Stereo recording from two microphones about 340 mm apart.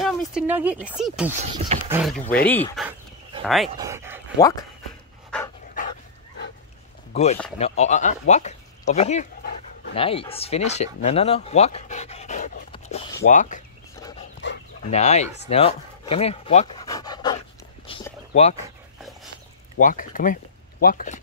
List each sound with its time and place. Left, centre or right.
0.0 s a sound: centre
0.8 s speech: centre
1.5 s speech: centre
2.0 s speech: centre
4.4 s speech: centre
5.3 s dog: centre
7.1 s speech: centre
14.4 s dog: left
15.4 s speech: centre
17.8 s a sound: centre
19.8 s speech: left